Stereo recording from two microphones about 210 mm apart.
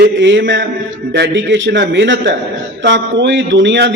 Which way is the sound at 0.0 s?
60° right (ahead or behind).